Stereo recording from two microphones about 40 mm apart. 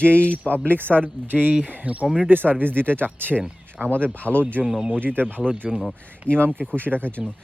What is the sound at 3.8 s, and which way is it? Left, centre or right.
Speech, centre.